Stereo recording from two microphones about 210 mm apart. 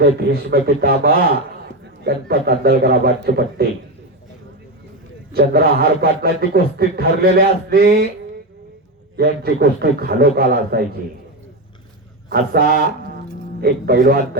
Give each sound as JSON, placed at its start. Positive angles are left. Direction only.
{"t": 0.0, "sound": "a man's voice", "side_deg": -50}
{"t": 5.3, "sound": "a man's voice", "side_deg": -50}
{"t": 9.1, "sound": "a man's voice", "side_deg": -50}
{"t": 12.3, "sound": "a man's voice", "side_deg": -45}